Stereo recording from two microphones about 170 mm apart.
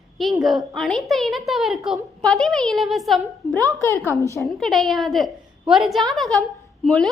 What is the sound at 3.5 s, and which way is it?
Speech, 20° right (ahead or behind).